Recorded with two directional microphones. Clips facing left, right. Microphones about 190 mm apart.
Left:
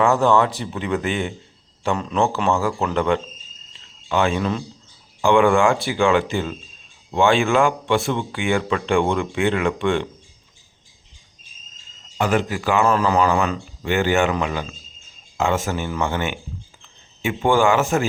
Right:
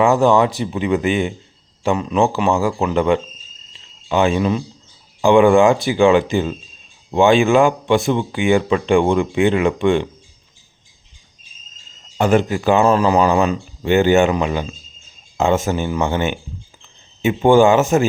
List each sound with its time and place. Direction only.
0.0 s speech: 15° right (ahead or behind)
3.7 s cricket: 20° right (ahead or behind)
5.2 s speech: 20° right (ahead or behind)
12.1 s speech: 25° right (ahead or behind)